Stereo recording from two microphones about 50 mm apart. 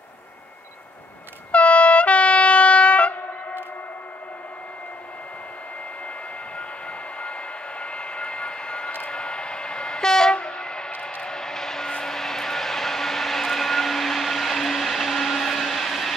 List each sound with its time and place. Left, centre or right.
1.5 s train: left
7.8 s vehicle: left; by 16.2 s centre